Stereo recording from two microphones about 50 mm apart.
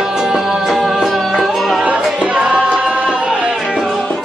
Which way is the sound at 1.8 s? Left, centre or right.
Right.